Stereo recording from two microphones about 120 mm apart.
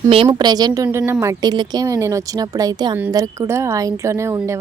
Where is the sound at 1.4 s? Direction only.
35° right (ahead or behind).